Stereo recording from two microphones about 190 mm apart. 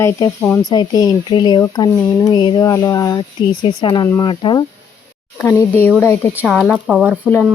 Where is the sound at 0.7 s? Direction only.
20° left (ahead or behind).